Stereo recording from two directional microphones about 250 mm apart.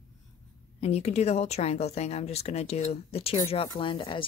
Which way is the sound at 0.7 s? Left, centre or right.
Left.